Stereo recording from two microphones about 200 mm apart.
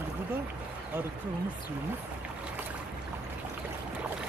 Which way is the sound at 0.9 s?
10° right (ahead or behind).